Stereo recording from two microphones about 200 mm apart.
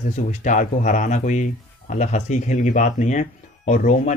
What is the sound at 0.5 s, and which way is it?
Speech, 40° left (ahead or behind).